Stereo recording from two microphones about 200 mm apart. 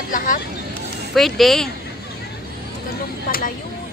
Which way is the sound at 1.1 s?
Centre (ahead or behind).